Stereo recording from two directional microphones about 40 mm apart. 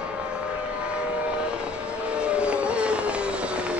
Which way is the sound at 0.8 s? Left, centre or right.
Right.